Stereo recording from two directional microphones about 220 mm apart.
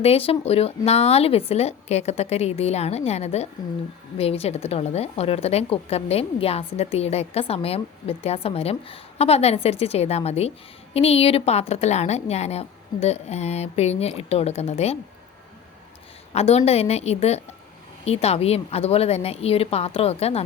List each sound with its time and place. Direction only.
0.0 s a woman's voice: 25° left (ahead or behind)
16.3 s a woman's voice: 30° left (ahead or behind)